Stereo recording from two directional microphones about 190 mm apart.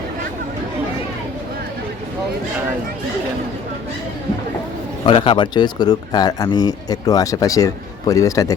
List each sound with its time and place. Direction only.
5.0 s speech: 25° left (ahead or behind)